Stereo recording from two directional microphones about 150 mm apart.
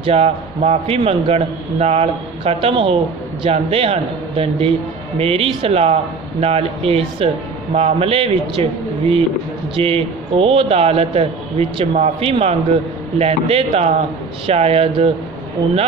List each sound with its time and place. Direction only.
0.0 s a man's voice: 40° right (ahead or behind)